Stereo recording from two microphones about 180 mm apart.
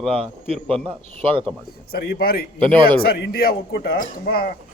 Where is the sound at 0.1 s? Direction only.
30° right (ahead or behind).